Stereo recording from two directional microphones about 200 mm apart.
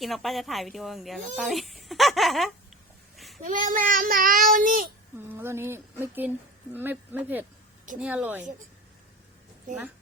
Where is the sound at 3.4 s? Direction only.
40° right (ahead or behind).